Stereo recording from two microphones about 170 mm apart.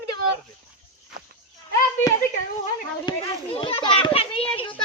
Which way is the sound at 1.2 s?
55° right (ahead or behind).